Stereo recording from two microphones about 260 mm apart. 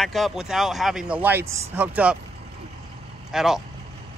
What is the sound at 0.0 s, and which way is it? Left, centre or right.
Speech, centre.